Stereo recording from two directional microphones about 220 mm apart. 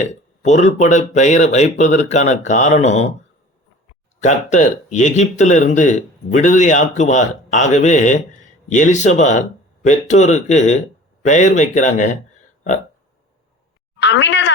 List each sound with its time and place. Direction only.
0.0 s speech: 30° left (ahead or behind)
4.2 s speech: 35° left (ahead or behind)
14.0 s speech: 55° left (ahead or behind)